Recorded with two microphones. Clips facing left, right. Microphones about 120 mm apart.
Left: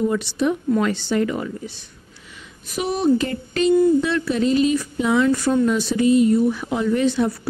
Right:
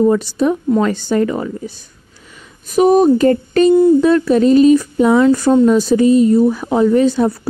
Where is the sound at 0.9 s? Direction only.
45° right (ahead or behind).